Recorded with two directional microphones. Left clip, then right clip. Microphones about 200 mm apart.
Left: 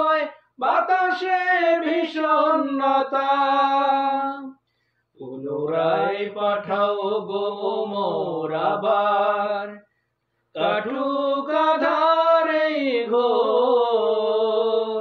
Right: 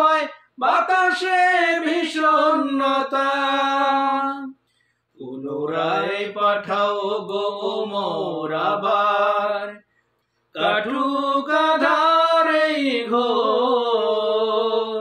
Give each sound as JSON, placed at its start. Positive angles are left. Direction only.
{"t": 0.0, "sound": "speech", "side_deg": -20}
{"t": 5.5, "sound": "mantra", "side_deg": -20}